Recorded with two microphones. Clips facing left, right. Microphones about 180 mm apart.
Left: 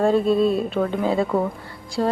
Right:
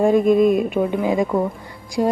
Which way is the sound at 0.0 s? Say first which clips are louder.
Right 3 dB; 15° right (ahead or behind).